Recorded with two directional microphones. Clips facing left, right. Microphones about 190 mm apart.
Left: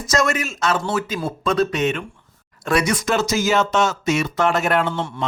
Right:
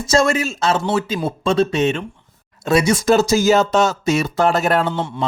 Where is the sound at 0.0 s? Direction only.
30° right (ahead or behind).